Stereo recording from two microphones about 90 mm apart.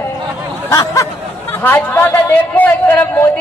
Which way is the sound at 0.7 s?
35° left (ahead or behind).